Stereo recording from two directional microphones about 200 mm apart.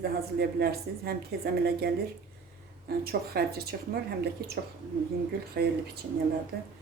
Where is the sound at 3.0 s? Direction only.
50° right (ahead or behind).